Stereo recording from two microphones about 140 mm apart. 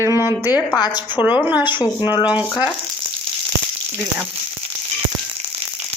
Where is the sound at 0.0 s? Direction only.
20° right (ahead or behind).